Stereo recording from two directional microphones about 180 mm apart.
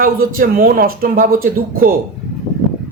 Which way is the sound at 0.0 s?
50° right (ahead or behind).